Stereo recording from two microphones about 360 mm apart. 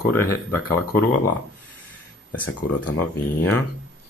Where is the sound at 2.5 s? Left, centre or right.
Left.